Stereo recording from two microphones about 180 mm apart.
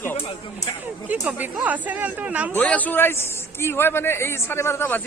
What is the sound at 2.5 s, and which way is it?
A man's voice, 10° left (ahead or behind).